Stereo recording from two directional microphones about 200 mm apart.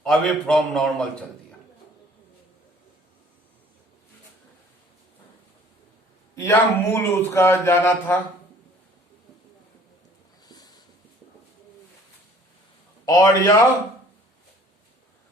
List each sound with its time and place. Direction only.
0.0 s a man's voice: centre (ahead or behind)
6.3 s speech: 15° left (ahead or behind)
10.5 s a sound: 20° left (ahead or behind)
13.1 s a man's voice: 20° left (ahead or behind)